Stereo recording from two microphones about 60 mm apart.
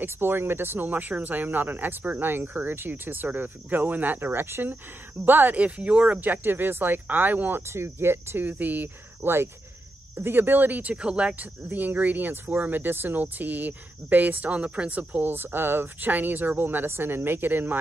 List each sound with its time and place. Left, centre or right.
0.0 s speech: right
7.6 s speech: right; by 11.4 s centre
11.7 s speech: right